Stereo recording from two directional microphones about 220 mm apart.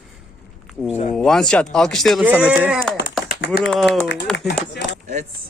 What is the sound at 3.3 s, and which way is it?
Typing, 45° left (ahead or behind).